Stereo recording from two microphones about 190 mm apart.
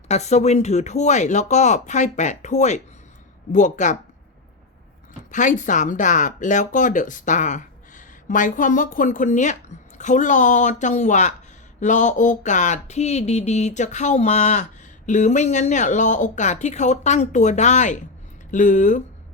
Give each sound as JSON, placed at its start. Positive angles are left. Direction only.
{"t": 0.1, "sound": "speech", "side_deg": 35}
{"t": 5.3, "sound": "speech", "side_deg": 40}